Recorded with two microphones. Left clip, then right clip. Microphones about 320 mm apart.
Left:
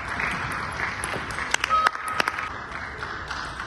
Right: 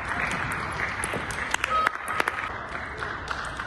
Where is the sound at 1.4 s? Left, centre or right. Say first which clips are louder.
Left 3 dB; left.